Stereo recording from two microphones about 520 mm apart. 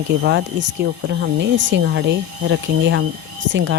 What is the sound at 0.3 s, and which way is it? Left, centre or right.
Speech, right.